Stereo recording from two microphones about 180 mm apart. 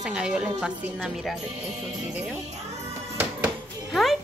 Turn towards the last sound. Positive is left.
turn(degrees=0)  # may be behind; listen again after turning